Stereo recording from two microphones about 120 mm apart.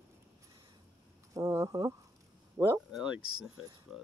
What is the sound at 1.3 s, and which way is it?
Speech, 30° right (ahead or behind).